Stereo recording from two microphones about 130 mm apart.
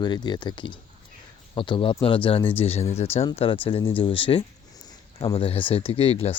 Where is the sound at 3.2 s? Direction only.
40° left (ahead or behind).